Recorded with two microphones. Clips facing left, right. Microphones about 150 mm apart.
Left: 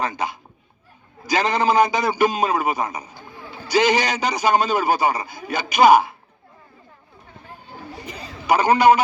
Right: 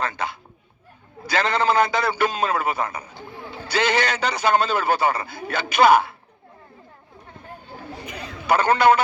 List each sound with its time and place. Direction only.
0.0 s a man's voice: 15° left (ahead or behind)
8.4 s a man's voice: 15° left (ahead or behind)